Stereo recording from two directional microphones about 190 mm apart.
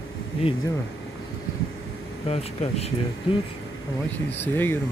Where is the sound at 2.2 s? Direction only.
35° left (ahead or behind).